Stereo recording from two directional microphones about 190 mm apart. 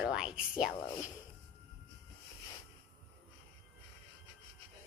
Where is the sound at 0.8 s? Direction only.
20° left (ahead or behind).